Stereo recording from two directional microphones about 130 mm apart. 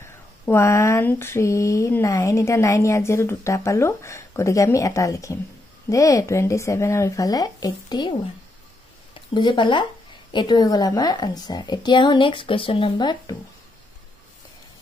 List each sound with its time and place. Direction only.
0.5 s a woman's voice: 20° left (ahead or behind)